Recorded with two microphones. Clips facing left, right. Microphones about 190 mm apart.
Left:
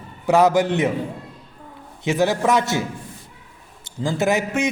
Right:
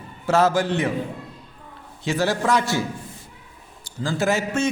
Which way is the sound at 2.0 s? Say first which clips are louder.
Left 3 dB; 20° left (ahead or behind).